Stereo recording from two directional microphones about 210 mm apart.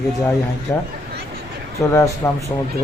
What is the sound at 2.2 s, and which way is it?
Speech, 15° left (ahead or behind).